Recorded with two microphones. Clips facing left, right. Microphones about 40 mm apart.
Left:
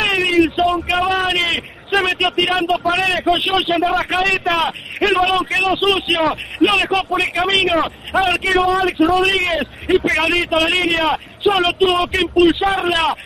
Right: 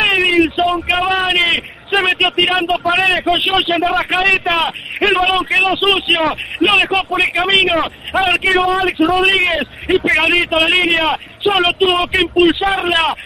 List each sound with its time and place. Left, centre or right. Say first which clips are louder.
0.0 s a sound: right 2 dB; right
3.0 s speech: right 4 dB; right
3.3 s a man's voice: right 2 dB; centre
6.1 s a man's voice: right 1 dB; centre
6.7 s a man's voice: right 3 dB; right
8.3 s a man's voice: right 3 dB; right